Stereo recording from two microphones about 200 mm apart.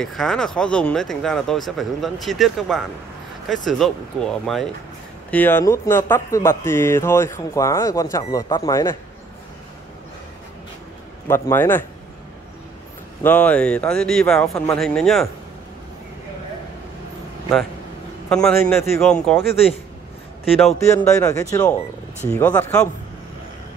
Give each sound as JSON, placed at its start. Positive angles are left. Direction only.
{"t": 0.0, "sound": "speech", "side_deg": 0}
{"t": 11.2, "sound": "speech", "side_deg": 10}
{"t": 13.2, "sound": "speech", "side_deg": 10}
{"t": 18.3, "sound": "speech", "side_deg": 5}
{"t": 20.6, "sound": "speech", "side_deg": 5}